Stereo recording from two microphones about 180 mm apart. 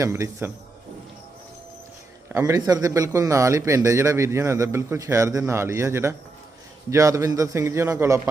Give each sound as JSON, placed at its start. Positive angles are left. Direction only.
{"t": 0.0, "sound": "a man's voice", "side_deg": -15}
{"t": 2.3, "sound": "a man's voice", "side_deg": -15}